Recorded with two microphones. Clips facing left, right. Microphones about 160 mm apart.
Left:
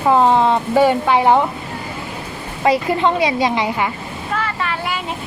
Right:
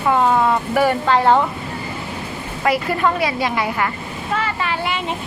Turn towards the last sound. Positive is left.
turn(degrees=0)  # may be behind; listen again after turning